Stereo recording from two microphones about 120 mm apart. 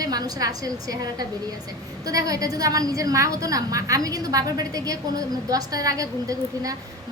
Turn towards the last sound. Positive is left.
turn(degrees=-30)  # may be behind; listen again after turning